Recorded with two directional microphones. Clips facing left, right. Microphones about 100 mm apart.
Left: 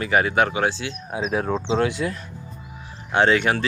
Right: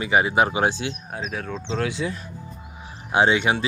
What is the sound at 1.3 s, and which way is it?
Speech, 25° left (ahead or behind).